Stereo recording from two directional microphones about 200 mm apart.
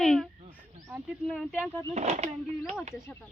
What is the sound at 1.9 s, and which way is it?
Speech, 30° right (ahead or behind).